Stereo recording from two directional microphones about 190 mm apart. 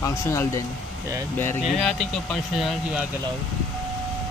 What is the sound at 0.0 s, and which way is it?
Speech, 15° left (ahead or behind).